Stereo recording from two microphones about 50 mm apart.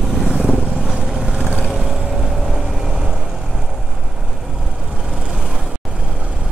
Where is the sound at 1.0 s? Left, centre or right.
Centre.